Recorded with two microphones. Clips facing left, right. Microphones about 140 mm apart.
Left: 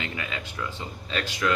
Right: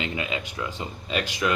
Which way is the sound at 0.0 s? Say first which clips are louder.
Right 4 dB; 20° right (ahead or behind).